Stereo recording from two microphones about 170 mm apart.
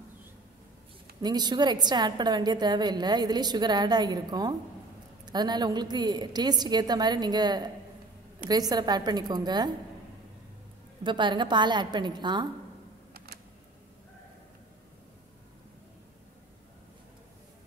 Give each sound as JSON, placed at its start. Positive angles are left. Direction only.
{"t": 1.2, "sound": "a woman's voice", "side_deg": -25}
{"t": 11.1, "sound": "a woman's voice", "side_deg": -30}